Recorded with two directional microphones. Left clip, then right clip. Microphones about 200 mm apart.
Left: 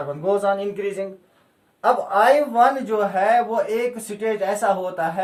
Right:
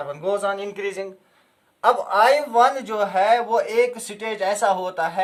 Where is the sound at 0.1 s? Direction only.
20° right (ahead or behind).